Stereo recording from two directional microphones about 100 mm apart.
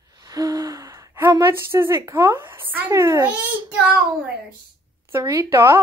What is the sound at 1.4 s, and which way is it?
Speech, 25° right (ahead or behind).